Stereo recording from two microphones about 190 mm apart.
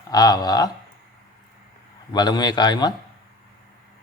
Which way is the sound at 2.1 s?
20° left (ahead or behind).